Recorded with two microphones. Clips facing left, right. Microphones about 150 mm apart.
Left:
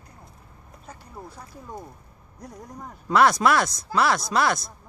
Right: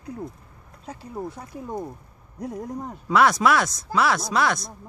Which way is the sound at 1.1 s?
20° right (ahead or behind).